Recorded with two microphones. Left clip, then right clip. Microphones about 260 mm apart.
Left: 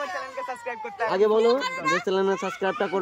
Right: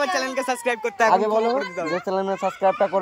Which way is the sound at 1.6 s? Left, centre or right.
Left.